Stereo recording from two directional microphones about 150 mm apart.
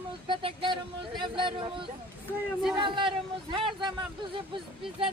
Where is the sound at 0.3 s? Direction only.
35° right (ahead or behind).